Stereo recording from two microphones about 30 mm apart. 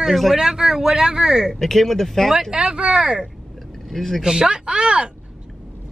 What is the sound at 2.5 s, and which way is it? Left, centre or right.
Speech, right.